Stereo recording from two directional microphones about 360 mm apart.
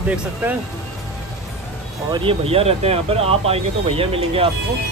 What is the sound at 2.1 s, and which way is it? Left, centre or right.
Speech, centre.